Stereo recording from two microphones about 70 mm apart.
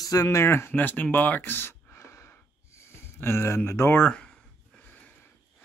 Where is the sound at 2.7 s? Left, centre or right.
Left.